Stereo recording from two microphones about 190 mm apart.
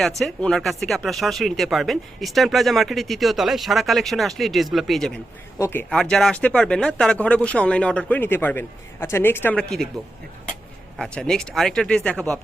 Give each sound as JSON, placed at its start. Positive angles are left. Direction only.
{"t": 0.2, "sound": "speech", "side_deg": 0}
{"t": 5.5, "sound": "a man's voice", "side_deg": 15}
{"t": 5.9, "sound": "speech", "side_deg": 5}
{"t": 10.9, "sound": "speech", "side_deg": 5}